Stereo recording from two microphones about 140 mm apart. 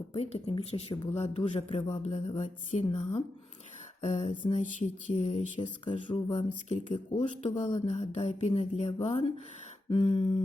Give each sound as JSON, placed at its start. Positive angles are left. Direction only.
{"t": 0.1, "sound": "speech", "side_deg": 45}
{"t": 1.9, "sound": "speech", "side_deg": 55}
{"t": 4.6, "sound": "speech", "side_deg": 60}
{"t": 5.5, "sound": "speech", "side_deg": 35}
{"t": 6.3, "sound": "speech", "side_deg": 60}
{"t": 6.8, "sound": "speech", "side_deg": 40}
{"t": 7.4, "sound": "speech", "side_deg": 55}
{"t": 9.9, "sound": "speech", "side_deg": 40}